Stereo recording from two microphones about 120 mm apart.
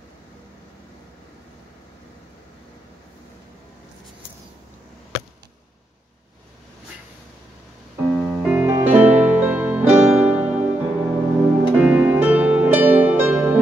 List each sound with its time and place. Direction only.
8.2 s music: 10° right (ahead or behind)